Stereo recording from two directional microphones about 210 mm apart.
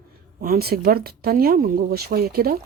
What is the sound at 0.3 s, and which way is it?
Speech, 45° right (ahead or behind).